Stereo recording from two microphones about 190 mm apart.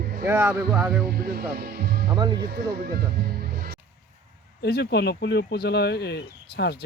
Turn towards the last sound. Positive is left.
turn(degrees=60)  # may be behind; listen again after turning